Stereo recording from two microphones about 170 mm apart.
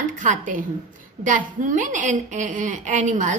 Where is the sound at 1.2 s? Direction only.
50° right (ahead or behind).